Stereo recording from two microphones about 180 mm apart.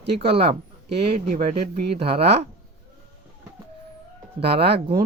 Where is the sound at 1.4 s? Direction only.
40° right (ahead or behind).